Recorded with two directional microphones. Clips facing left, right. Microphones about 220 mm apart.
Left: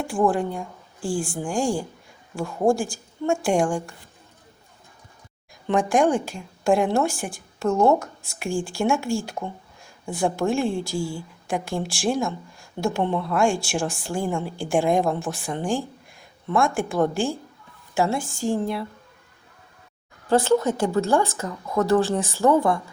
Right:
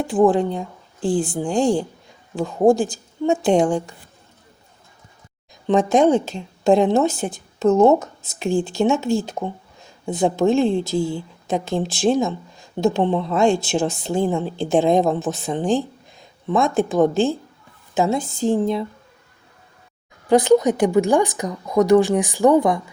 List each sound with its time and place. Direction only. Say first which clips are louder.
0.0 s a woman's voice: right 6 dB; 20° right (ahead or behind)
5.6 s a woman's voice: right 4 dB; 20° right (ahead or behind)
20.2 s speech: right 5 dB; 15° right (ahead or behind)